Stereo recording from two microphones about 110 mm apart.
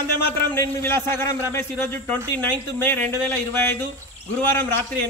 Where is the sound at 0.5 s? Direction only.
25° left (ahead or behind).